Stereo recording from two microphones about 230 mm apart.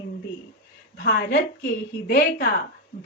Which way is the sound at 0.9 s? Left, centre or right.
Left.